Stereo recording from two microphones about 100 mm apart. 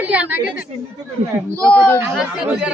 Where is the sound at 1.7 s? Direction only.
15° left (ahead or behind).